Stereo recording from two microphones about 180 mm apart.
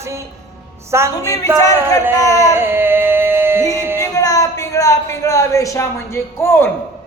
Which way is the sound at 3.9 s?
20° left (ahead or behind).